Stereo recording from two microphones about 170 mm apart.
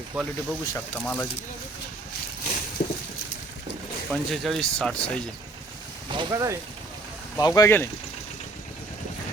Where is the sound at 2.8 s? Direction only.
60° left (ahead or behind).